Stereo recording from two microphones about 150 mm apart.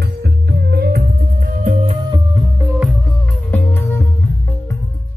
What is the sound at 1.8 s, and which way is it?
Music, 35° right (ahead or behind).